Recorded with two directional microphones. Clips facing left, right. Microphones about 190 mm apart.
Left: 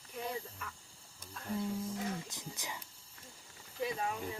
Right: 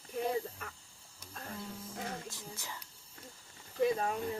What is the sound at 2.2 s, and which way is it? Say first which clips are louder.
Speech: even; 20° left (ahead or behind).